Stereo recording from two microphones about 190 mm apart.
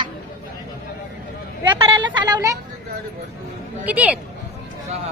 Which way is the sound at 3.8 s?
10° right (ahead or behind).